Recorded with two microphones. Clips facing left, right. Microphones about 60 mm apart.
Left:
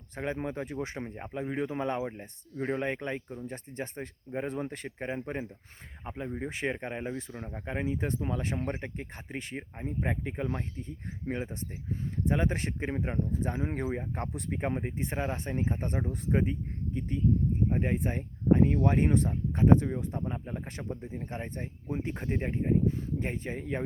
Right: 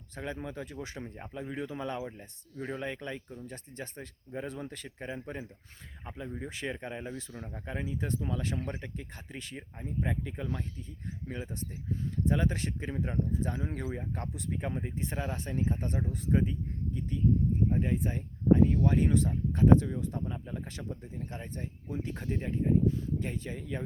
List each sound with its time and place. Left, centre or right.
0.2 s speech: left